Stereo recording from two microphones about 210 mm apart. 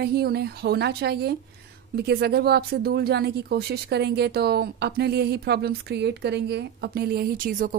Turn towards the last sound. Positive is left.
turn(degrees=-40)  # may be behind; listen again after turning